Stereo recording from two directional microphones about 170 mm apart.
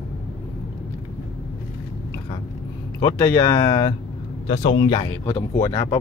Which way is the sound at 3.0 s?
15° left (ahead or behind).